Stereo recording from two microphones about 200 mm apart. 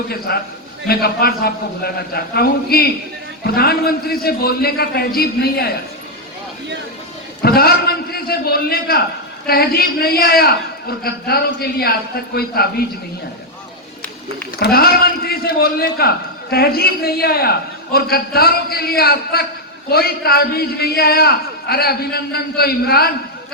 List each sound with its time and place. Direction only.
0.3 s a man's voice: 55° left (ahead or behind)
7.4 s a man's voice: 50° left (ahead or behind)
14.6 s a man's voice: 50° left (ahead or behind)